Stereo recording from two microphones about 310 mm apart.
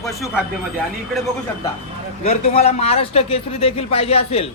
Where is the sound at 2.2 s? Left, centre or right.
Centre.